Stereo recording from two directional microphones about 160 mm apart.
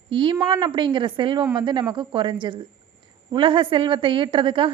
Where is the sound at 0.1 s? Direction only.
30° right (ahead or behind).